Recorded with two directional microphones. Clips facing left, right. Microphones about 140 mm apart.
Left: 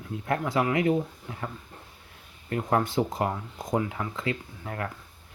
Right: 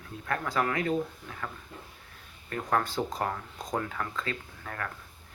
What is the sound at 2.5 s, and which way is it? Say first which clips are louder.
Speech: left 3 dB; 20° left (ahead or behind).